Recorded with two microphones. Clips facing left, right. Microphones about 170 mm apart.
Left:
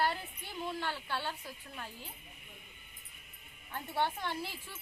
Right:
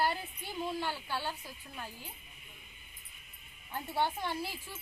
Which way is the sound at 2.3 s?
55° left (ahead or behind).